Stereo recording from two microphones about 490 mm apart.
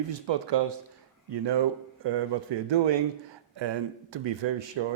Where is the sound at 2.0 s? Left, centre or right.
Right.